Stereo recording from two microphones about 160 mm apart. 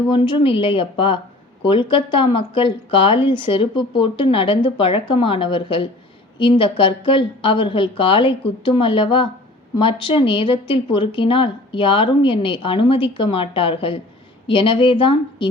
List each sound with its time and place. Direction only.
0.1 s speech: 30° left (ahead or behind)